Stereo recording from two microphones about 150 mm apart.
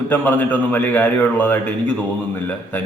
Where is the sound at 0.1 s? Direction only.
10° left (ahead or behind).